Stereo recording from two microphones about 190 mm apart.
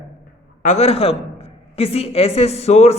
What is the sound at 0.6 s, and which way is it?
A woman's voice, 35° left (ahead or behind).